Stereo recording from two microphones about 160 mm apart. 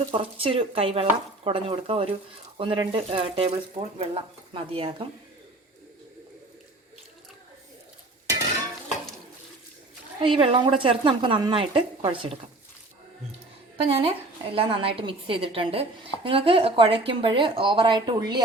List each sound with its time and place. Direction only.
0.1 s speech: 35° right (ahead or behind)
10.2 s speech: 35° right (ahead or behind)
13.8 s speech: 35° right (ahead or behind)